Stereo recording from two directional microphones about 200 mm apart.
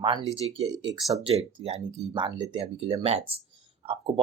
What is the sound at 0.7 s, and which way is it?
Speech, 20° right (ahead or behind).